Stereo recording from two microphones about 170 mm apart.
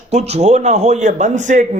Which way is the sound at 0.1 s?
40° right (ahead or behind).